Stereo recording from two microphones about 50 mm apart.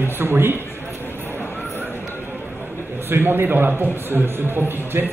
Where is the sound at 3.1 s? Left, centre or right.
Right.